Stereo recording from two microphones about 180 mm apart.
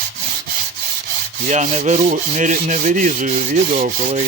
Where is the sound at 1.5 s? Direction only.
40° right (ahead or behind).